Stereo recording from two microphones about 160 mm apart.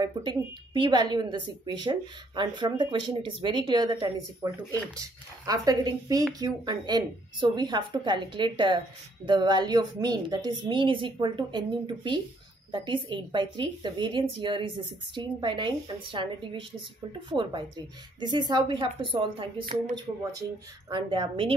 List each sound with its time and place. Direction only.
0.0 s a woman's voice: 30° right (ahead or behind)